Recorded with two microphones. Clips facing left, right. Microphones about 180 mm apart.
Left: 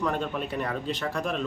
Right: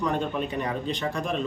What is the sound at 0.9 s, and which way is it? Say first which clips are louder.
Speech: right 1 dB; 5° left (ahead or behind).